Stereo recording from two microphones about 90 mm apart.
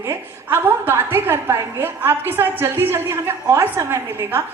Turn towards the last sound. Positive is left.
turn(degrees=-30)  # may be behind; listen again after turning